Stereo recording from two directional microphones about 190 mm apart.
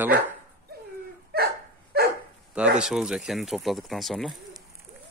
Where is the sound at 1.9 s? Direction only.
55° right (ahead or behind).